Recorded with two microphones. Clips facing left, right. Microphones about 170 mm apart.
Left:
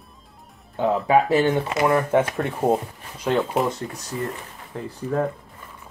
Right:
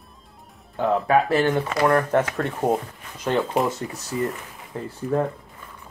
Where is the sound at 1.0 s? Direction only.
15° left (ahead or behind).